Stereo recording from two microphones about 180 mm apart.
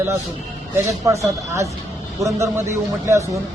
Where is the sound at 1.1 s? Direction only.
15° right (ahead or behind).